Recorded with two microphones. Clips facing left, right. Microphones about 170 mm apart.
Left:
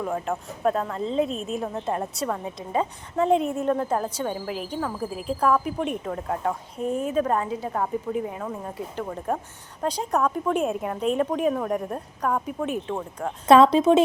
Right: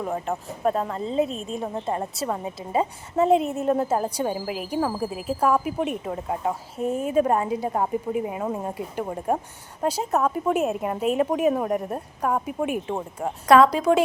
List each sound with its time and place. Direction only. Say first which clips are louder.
0.0 s a woman's voice: even; centre (ahead or behind)
8.4 s speech: right 5 dB; 25° right (ahead or behind)
9.0 s speech: right 3 dB; 10° right (ahead or behind)
13.5 s a woman's voice: left 1 dB; 25° left (ahead or behind)